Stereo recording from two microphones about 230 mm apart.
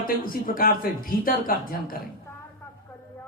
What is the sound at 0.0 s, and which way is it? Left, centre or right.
A man's voice, left.